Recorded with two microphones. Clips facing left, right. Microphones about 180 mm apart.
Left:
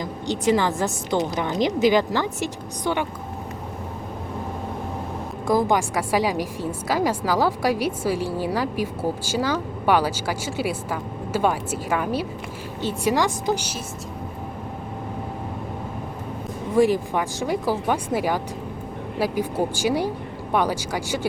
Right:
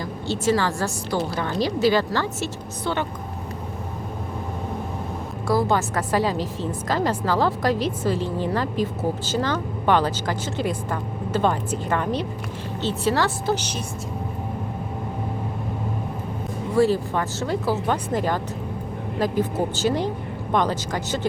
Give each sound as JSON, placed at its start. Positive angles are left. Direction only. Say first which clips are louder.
{"t": 0.0, "sound": "a woman's voice", "louder": "left 1 dB", "side_deg": 15}
{"t": 5.5, "sound": "a woman's voice", "louder": "left 1 dB", "side_deg": 15}
{"t": 16.7, "sound": "a woman's voice", "louder": "left 1 dB", "side_deg": 15}